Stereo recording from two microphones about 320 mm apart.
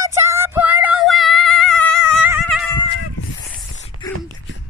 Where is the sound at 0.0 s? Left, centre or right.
Centre.